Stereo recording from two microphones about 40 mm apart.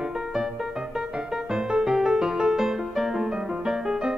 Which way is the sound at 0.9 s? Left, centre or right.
Centre.